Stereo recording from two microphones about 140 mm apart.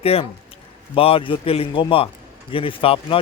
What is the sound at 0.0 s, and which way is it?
Speech, 45° left (ahead or behind).